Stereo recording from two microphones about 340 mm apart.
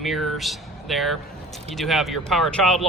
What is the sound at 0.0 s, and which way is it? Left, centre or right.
Speech, centre.